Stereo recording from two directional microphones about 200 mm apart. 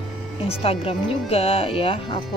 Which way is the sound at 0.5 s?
30° left (ahead or behind).